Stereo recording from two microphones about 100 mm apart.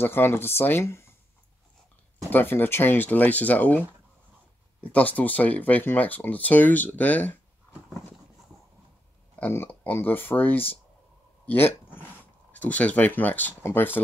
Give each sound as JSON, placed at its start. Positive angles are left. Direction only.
{"t": 0.0, "sound": "speech", "side_deg": 20}
{"t": 2.3, "sound": "speech", "side_deg": 20}
{"t": 4.9, "sound": "speech", "side_deg": 15}
{"t": 9.5, "sound": "speech", "side_deg": 20}